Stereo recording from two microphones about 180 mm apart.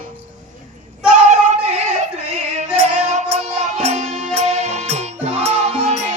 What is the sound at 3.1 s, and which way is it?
Music, 40° right (ahead or behind).